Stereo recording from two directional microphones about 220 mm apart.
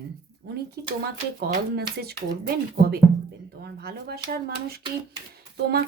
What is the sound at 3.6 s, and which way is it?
Speech, 45° right (ahead or behind).